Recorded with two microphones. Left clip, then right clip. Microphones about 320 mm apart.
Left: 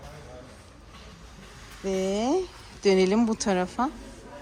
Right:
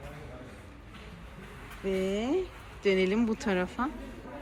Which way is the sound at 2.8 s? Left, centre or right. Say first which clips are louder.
Left 5 dB; centre.